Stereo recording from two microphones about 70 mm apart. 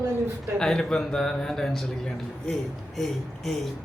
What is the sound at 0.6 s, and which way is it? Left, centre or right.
A man's voice, centre.